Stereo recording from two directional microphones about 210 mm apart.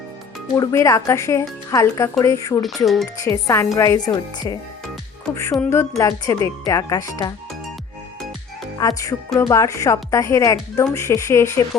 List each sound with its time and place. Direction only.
0.5 s a woman's voice: 15° left (ahead or behind)
2.6 s speech: centre (ahead or behind)
3.2 s a woman's voice: 15° left (ahead or behind)
8.8 s a woman's voice: 15° left (ahead or behind)